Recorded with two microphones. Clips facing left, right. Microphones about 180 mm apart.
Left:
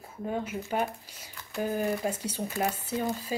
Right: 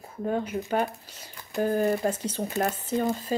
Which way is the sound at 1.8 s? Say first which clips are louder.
Right 4 dB; 40° right (ahead or behind).